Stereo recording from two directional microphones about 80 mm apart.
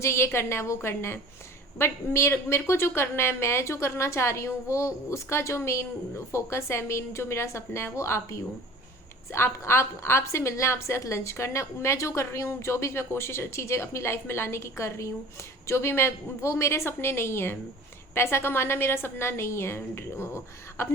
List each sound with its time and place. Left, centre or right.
0.0 s a woman's voice: left